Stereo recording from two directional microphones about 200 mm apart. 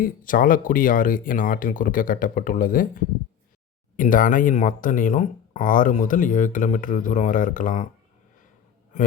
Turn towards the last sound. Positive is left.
turn(degrees=40)  # may be behind; listen again after turning